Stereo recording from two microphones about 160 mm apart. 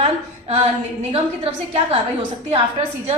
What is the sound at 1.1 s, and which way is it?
Speech, 40° right (ahead or behind).